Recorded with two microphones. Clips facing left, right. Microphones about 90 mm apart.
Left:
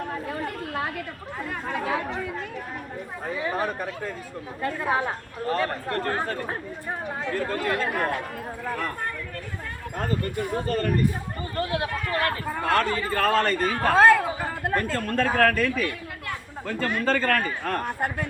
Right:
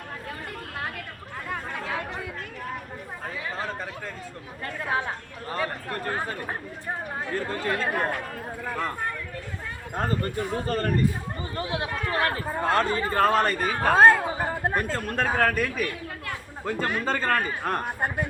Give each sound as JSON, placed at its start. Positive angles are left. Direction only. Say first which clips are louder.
{"t": 3.5, "sound": "a sound", "louder": "left 4 dB", "side_deg": 15}
{"t": 5.5, "sound": "a man's voice", "louder": "left 4 dB", "side_deg": -15}
{"t": 7.3, "sound": "a man's voice", "louder": "left 1 dB", "side_deg": -30}
{"t": 9.9, "sound": "speech", "louder": "right 1 dB", "side_deg": -35}
{"t": 11.5, "sound": "a man's voice", "louder": "left 3 dB", "side_deg": -20}
{"t": 13.8, "sound": "a man's voice", "louder": "even", "side_deg": -20}